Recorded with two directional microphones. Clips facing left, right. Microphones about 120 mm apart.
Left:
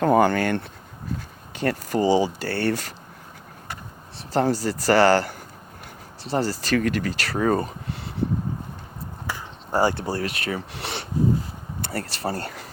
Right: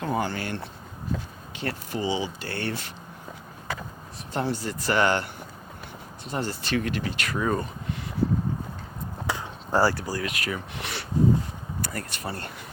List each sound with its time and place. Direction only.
0.0 s speech: 55° left (ahead or behind)
4.3 s speech: 35° left (ahead or behind)
7.3 s a sound: 40° left (ahead or behind)
9.7 s speech: 20° left (ahead or behind)